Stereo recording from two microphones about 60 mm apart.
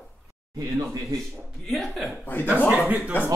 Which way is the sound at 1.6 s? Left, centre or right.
Centre.